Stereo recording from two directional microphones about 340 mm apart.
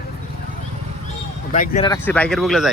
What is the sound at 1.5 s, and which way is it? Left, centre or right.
Speech, left.